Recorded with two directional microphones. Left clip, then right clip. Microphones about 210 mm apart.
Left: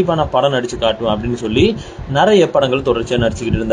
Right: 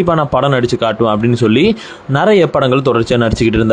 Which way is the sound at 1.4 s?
35° right (ahead or behind).